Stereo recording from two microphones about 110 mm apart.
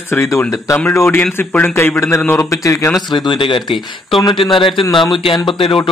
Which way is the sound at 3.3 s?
50° left (ahead or behind).